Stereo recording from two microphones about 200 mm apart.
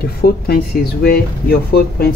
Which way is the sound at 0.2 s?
50° left (ahead or behind).